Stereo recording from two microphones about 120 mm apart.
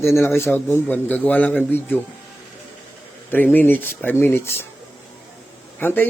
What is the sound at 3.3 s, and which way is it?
A man's voice, 15° left (ahead or behind).